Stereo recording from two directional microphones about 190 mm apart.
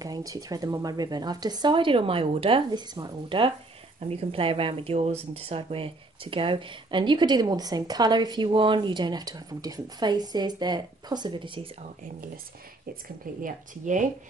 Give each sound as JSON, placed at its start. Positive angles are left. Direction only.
{"t": 0.0, "sound": "speech", "side_deg": -20}
{"t": 13.4, "sound": "speech", "side_deg": -45}